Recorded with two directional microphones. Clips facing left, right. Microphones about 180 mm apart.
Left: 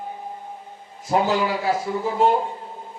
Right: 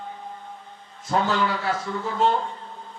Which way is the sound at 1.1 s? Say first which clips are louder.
Left 3 dB; 20° left (ahead or behind).